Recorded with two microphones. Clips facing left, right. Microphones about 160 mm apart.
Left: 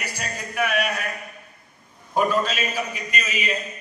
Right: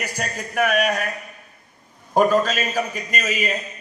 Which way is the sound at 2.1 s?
45° right (ahead or behind).